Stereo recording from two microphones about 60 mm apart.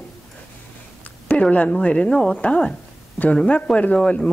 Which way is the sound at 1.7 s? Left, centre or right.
Centre.